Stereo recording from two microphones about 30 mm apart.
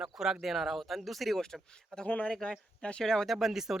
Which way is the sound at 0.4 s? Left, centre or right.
Centre.